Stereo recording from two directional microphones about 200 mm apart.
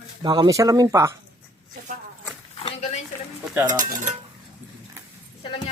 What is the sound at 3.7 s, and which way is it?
Dishes, 40° right (ahead or behind).